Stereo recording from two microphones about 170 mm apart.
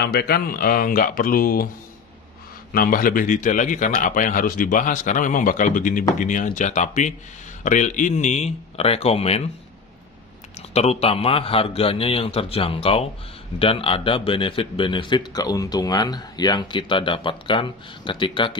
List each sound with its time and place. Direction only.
0.0 s speech: 70° left (ahead or behind)
2.7 s a man's voice: 55° left (ahead or behind); by 9.4 s 35° left (ahead or behind)
10.7 s a man's voice: 40° left (ahead or behind)